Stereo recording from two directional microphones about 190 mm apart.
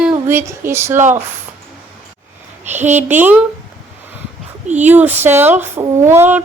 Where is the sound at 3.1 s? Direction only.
10° right (ahead or behind).